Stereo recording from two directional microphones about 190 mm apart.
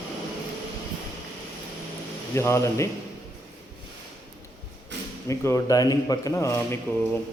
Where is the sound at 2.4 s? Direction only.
15° left (ahead or behind).